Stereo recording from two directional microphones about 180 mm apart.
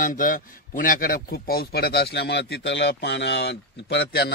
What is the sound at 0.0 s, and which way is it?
A man's voice, 50° left (ahead or behind).